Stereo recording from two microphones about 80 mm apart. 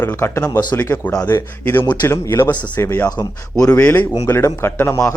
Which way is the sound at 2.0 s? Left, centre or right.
Left.